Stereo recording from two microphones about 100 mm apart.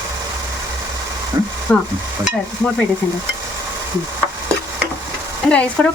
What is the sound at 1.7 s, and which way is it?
Stir, 10° left (ahead or behind).